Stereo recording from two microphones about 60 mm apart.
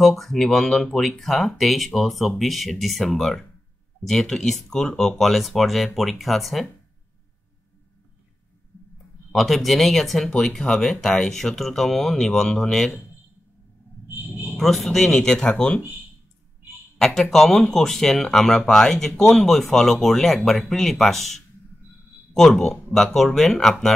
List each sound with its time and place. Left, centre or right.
0.0 s speech: centre
9.3 s speech: centre
14.6 s speech: centre
17.0 s speech: centre